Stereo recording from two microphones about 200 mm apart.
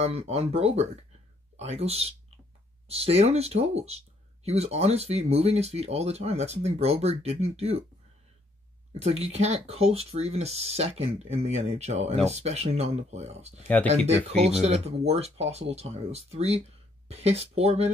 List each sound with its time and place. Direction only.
0.0 s speech: 30° right (ahead or behind)
9.0 s speech: 30° right (ahead or behind)